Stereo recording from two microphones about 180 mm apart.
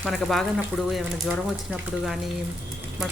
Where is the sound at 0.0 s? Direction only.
Centre (ahead or behind).